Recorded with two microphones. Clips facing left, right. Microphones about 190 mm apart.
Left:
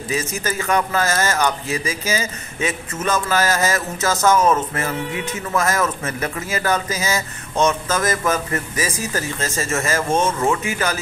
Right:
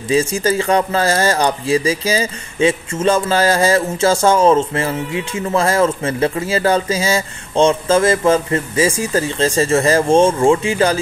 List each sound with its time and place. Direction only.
0.1 s speech: 30° right (ahead or behind)